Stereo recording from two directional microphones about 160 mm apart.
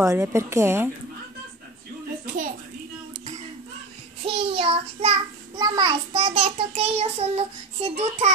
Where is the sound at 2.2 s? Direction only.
55° right (ahead or behind).